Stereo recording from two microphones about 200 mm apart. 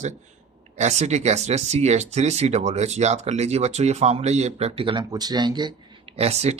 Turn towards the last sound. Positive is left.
turn(degrees=-30)  # may be behind; listen again after turning